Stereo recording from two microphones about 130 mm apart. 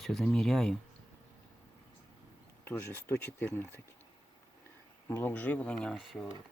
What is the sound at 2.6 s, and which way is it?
Speech, 15° left (ahead or behind).